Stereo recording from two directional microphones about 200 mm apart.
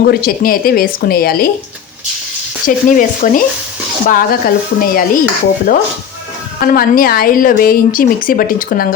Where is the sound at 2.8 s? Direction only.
40° left (ahead or behind).